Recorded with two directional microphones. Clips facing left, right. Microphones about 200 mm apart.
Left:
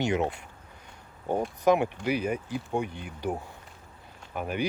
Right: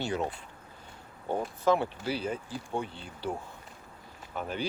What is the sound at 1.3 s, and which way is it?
Speech, 15° left (ahead or behind).